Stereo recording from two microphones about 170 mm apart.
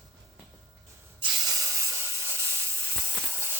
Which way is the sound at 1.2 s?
25° right (ahead or behind).